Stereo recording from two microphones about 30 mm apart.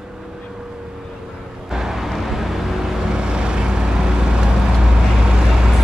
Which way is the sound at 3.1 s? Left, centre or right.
Right.